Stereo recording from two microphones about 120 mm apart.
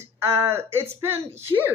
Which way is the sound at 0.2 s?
20° right (ahead or behind).